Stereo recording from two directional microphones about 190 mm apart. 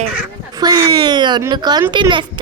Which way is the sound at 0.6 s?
20° right (ahead or behind).